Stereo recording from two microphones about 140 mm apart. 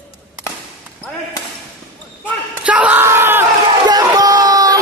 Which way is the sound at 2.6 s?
10° right (ahead or behind).